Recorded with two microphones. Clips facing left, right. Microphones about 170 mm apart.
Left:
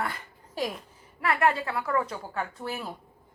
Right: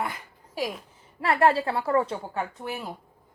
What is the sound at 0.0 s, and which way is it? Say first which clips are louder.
Speech: right 1 dB; 10° right (ahead or behind).